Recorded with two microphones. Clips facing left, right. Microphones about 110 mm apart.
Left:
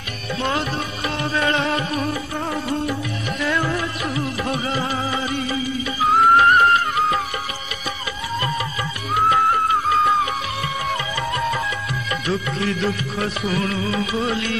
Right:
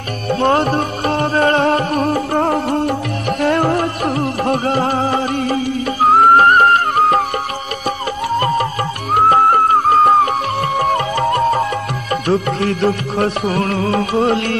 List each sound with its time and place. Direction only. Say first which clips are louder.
0.3 s music: right 9 dB; 50° right (ahead or behind)
6.0 s music: right 5 dB; 50° right (ahead or behind)
8.4 s music: right 8 dB; 50° right (ahead or behind)